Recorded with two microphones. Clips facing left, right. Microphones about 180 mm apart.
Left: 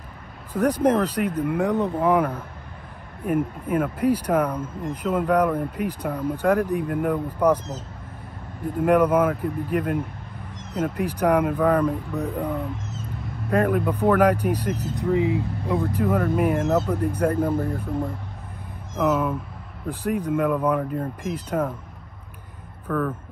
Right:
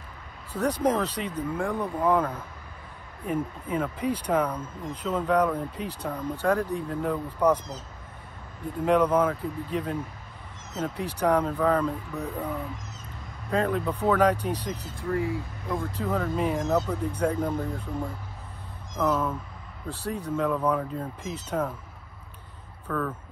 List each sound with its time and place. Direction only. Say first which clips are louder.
0.5 s speech: left 5 dB; 10° left (ahead or behind)
1.6 s speech: left 5 dB; 20° left (ahead or behind)
15.0 s speech: left 6 dB; 20° left (ahead or behind)
22.8 s speech: left 5 dB; 5° left (ahead or behind)